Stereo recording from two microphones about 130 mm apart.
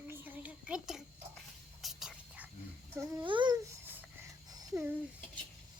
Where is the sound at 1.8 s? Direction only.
5° right (ahead or behind).